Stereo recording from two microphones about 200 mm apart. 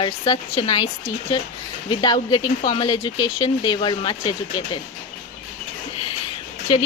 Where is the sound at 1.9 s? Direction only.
20° left (ahead or behind).